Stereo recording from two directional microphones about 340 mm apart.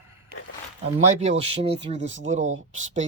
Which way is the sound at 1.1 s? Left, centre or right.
Centre.